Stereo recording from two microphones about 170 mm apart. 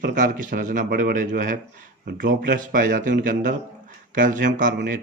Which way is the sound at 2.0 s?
65° right (ahead or behind).